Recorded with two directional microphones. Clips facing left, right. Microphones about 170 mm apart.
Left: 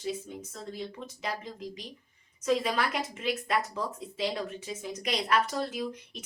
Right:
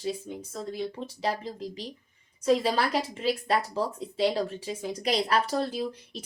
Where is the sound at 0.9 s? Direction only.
30° right (ahead or behind).